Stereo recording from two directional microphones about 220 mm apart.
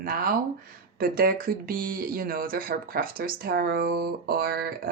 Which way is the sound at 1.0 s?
40° right (ahead or behind).